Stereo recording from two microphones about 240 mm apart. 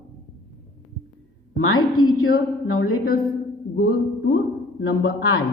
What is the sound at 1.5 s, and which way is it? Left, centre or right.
A woman's voice, left.